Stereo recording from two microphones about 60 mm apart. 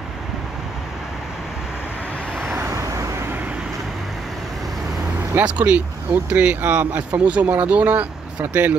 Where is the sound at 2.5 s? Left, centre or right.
Right.